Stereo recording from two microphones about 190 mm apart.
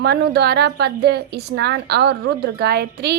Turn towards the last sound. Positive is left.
turn(degrees=-60)  # may be behind; listen again after turning